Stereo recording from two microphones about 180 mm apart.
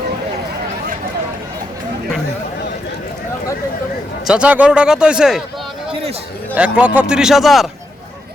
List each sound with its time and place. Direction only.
4.3 s a man's voice: 5° right (ahead or behind)
5.9 s a sound: 35° right (ahead or behind)
6.5 s a man's voice: 10° right (ahead or behind)